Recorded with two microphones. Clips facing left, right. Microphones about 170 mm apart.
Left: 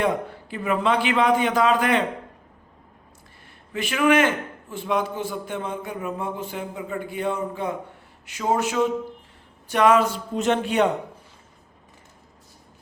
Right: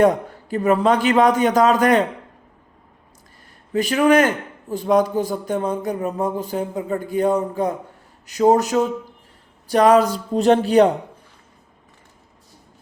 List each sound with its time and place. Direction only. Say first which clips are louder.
0.0 s a man's voice: right 7 dB; 40° right (ahead or behind)
3.7 s a man's voice: right 5 dB; 40° right (ahead or behind)